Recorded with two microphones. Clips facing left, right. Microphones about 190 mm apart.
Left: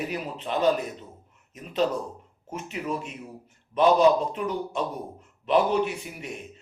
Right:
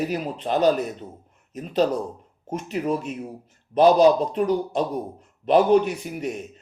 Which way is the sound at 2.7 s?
40° right (ahead or behind).